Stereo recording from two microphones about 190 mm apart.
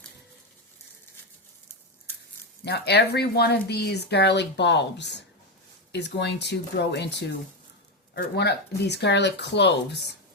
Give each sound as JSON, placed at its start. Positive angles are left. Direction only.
{"t": 2.6, "sound": "speech", "side_deg": 60}